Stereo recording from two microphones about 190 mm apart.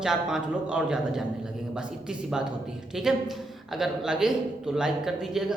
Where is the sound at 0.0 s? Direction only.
5° right (ahead or behind).